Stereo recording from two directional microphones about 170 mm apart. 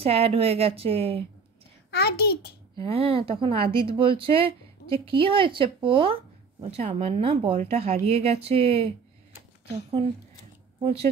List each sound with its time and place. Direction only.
0.0 s speech: 35° right (ahead or behind)
1.9 s a child's voice: 70° left (ahead or behind)
2.8 s speech: 35° right (ahead or behind)